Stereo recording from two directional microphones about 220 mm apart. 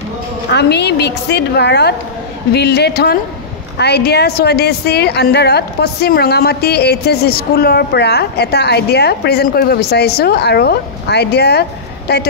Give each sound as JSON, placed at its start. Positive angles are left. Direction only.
{"t": 0.5, "sound": "a woman's voice", "side_deg": 50}